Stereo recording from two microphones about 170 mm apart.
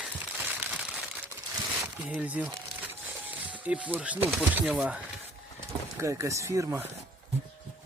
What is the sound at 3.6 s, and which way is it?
Speech, 10° right (ahead or behind).